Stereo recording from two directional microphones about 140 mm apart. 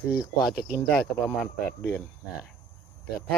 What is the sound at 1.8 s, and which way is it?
Speech, 10° left (ahead or behind).